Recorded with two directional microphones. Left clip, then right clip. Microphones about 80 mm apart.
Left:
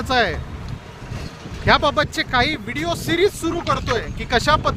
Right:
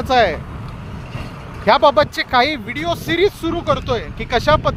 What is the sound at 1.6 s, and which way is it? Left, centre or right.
Speech, centre.